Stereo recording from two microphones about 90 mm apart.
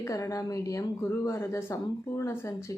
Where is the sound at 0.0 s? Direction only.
35° left (ahead or behind).